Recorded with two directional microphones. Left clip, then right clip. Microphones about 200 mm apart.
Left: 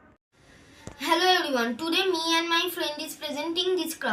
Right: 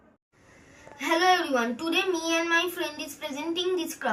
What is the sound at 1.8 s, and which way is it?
Child singing, 15° right (ahead or behind).